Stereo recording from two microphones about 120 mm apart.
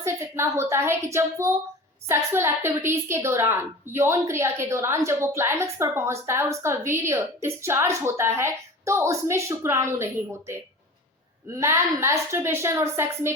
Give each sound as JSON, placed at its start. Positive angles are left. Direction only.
{"t": 0.0, "sound": "a woman's voice", "side_deg": -20}
{"t": 11.5, "sound": "a woman's voice", "side_deg": -25}